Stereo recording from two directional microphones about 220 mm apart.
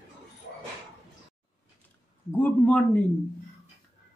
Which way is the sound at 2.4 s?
5° left (ahead or behind).